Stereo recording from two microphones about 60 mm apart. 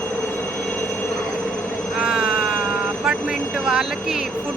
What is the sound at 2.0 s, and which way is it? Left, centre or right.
Speech, centre.